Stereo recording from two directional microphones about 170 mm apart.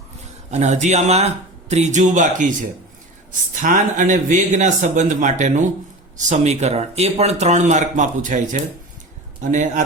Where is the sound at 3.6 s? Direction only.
50° right (ahead or behind).